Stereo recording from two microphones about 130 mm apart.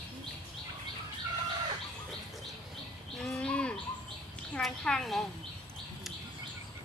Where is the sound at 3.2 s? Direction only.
5° left (ahead or behind).